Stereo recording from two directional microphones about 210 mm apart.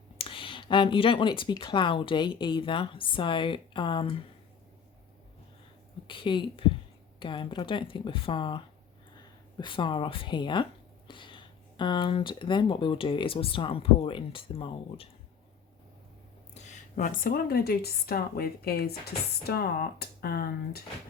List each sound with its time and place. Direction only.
0.2 s speech: 25° left (ahead or behind)
6.1 s speech: 25° left (ahead or behind)
16.6 s a woman's voice: 35° left (ahead or behind)